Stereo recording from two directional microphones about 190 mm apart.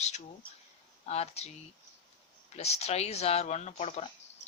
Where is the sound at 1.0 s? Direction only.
35° left (ahead or behind).